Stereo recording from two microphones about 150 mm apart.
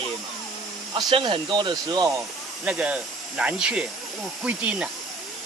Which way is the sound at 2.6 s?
5° right (ahead or behind).